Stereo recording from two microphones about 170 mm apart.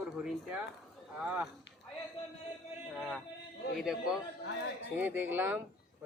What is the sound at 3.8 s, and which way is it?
Speech, 5° right (ahead or behind).